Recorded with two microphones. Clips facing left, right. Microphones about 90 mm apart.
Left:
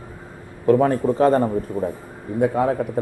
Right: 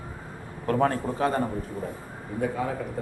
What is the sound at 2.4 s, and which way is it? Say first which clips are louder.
Speech: left 9 dB; 65° left (ahead or behind).